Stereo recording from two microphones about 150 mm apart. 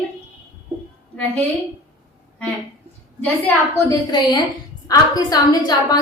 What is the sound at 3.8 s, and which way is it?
A woman's voice, 25° left (ahead or behind).